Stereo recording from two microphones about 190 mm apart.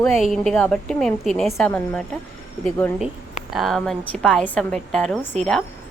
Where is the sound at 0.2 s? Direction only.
Centre (ahead or behind).